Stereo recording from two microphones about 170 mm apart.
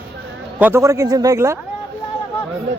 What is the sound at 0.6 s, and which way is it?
Speech, 15° right (ahead or behind).